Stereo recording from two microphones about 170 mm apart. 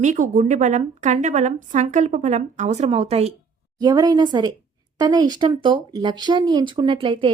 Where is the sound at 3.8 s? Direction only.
25° right (ahead or behind).